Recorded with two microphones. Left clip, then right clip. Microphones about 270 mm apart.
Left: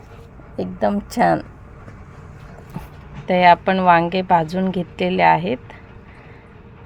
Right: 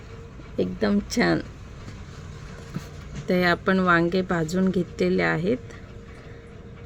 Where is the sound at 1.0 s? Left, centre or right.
Left.